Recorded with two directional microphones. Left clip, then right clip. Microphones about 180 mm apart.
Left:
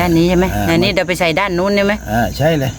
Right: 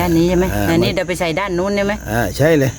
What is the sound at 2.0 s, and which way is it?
Speech, 65° right (ahead or behind).